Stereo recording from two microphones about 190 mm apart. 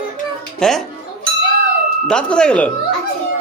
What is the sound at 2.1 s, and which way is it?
Speech, 5° left (ahead or behind).